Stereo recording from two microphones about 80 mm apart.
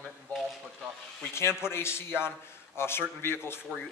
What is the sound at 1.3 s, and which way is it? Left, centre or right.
Speech, left.